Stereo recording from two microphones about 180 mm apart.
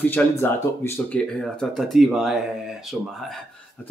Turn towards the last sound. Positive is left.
turn(degrees=-5)  # may be behind; listen again after turning